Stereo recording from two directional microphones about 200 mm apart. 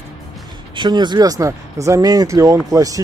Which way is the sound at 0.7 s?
20° right (ahead or behind).